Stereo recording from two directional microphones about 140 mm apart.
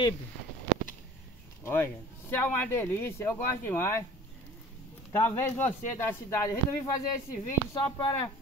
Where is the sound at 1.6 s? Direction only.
15° left (ahead or behind).